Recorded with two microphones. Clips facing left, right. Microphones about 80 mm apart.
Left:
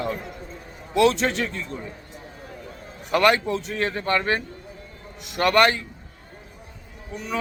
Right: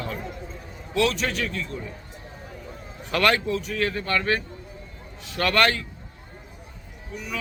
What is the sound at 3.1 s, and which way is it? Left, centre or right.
Speech, centre.